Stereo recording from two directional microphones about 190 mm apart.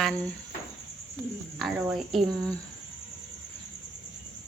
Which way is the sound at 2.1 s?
20° right (ahead or behind).